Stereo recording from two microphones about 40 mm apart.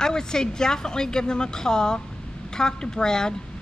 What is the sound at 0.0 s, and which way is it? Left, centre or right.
A woman's voice, centre.